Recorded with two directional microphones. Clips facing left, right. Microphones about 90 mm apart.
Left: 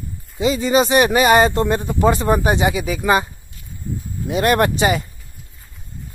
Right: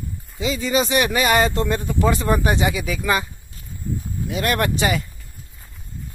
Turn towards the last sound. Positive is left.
turn(degrees=25)  # may be behind; listen again after turning